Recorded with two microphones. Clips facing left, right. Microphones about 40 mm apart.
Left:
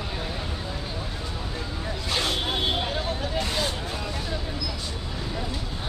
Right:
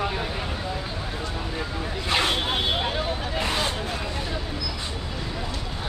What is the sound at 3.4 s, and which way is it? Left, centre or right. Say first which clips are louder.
Vehicle: right 4 dB; right.